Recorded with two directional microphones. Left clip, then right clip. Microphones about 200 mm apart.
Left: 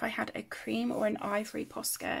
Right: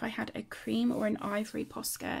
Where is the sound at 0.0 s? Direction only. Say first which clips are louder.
Left 3 dB; 5° right (ahead or behind).